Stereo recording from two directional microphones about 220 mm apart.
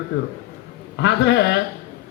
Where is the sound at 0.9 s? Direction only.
50° left (ahead or behind).